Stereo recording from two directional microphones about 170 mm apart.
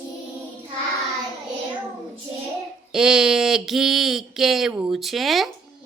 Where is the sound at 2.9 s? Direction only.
5° right (ahead or behind).